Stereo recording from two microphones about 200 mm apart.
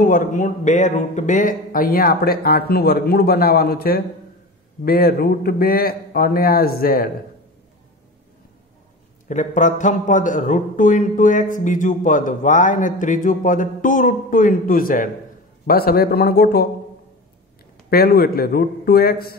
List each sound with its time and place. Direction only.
0.0 s a man's voice: 40° left (ahead or behind)
9.3 s a man's voice: 40° left (ahead or behind)
17.8 s a man's voice: 50° left (ahead or behind)